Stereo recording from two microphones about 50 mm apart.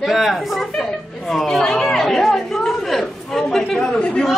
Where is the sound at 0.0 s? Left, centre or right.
Centre.